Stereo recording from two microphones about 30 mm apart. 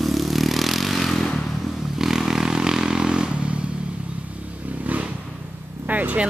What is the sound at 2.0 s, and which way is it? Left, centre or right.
Vehicle, centre.